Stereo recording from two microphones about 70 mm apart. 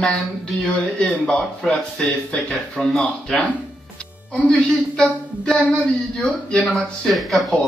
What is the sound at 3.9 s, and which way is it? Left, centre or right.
Music, centre.